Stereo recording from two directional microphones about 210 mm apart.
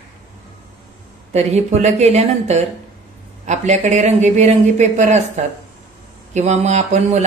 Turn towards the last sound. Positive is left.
turn(degrees=-35)  # may be behind; listen again after turning